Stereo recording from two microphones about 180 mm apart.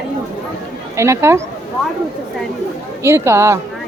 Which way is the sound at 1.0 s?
15° right (ahead or behind).